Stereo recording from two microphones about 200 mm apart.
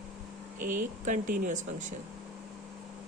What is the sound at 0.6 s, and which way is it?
Speech, 40° right (ahead or behind).